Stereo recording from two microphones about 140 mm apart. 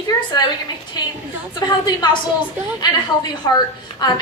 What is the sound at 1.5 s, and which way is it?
Speech, 30° left (ahead or behind).